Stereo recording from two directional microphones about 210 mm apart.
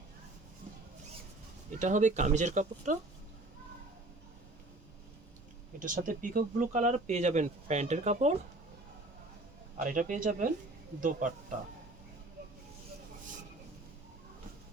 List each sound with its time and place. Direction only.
1.8 s speech: 35° right (ahead or behind)
5.8 s speech: 40° right (ahead or behind)
9.7 s speech: 40° right (ahead or behind)